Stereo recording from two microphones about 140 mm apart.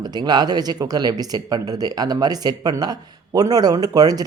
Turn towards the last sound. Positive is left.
turn(degrees=-30)  # may be behind; listen again after turning